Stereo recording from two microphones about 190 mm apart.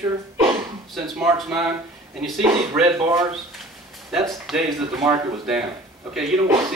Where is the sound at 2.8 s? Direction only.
15° right (ahead or behind).